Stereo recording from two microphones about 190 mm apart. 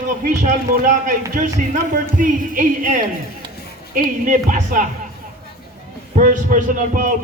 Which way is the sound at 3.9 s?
45° right (ahead or behind).